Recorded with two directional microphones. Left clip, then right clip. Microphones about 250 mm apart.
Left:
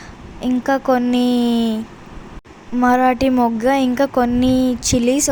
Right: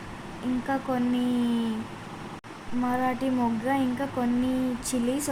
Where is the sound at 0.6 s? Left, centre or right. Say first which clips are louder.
Left 12 dB; left.